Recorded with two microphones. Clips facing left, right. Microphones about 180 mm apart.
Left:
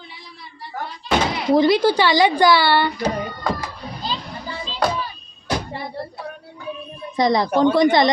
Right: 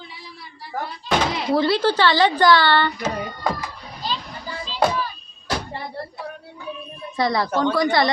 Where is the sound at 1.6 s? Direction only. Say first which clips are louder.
Left 3 dB; 15° left (ahead or behind).